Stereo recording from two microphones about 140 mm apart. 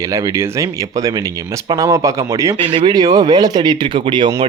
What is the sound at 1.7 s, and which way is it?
Speech, 25° right (ahead or behind).